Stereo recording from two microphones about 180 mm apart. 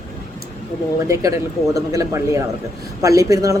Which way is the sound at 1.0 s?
15° right (ahead or behind).